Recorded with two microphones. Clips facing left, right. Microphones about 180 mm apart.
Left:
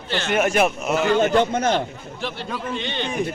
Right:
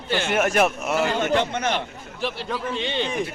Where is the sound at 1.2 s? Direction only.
40° left (ahead or behind).